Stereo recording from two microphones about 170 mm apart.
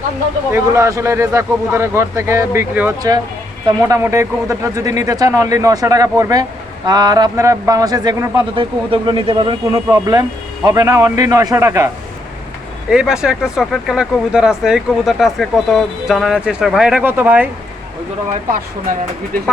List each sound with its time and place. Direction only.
0.5 s a man's voice: 20° right (ahead or behind)
12.9 s speech: 5° right (ahead or behind)
18.5 s speech: 55° right (ahead or behind)